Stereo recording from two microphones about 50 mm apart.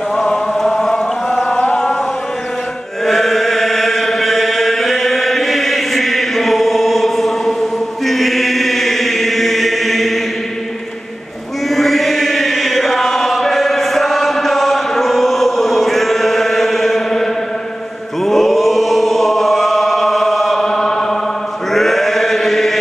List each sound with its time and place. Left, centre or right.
0.6 s chant: centre
1.3 s chant: left
3.1 s chant: centre
11.7 s chant: centre